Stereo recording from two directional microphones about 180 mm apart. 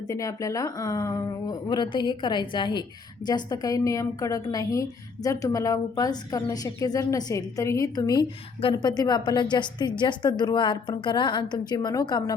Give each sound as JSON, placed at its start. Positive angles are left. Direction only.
{"t": 0.1, "sound": "a woman's voice", "side_deg": 20}